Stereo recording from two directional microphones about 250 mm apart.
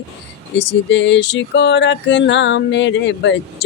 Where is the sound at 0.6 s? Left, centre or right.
Left.